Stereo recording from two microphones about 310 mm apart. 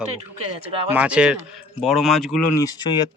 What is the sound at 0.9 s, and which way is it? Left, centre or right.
Speech, centre.